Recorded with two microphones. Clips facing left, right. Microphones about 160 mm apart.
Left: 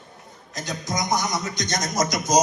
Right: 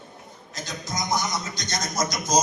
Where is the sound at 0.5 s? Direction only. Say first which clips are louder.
Left 4 dB; 15° left (ahead or behind).